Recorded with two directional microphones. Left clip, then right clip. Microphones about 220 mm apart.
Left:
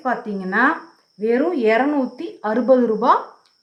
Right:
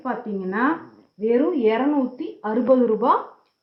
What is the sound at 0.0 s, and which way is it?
Speech, 25° left (ahead or behind).